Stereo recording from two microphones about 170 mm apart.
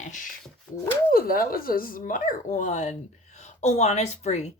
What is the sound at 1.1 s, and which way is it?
A woman's voice, 60° left (ahead or behind).